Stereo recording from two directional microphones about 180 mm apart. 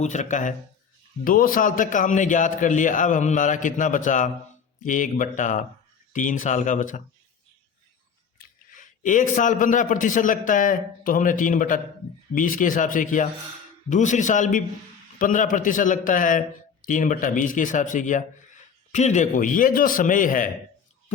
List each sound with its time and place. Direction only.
0.0 s speech: 40° left (ahead or behind)
8.7 s speech: 45° left (ahead or behind)